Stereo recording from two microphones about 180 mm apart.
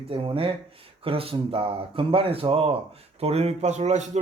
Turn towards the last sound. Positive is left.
turn(degrees=-40)  # may be behind; listen again after turning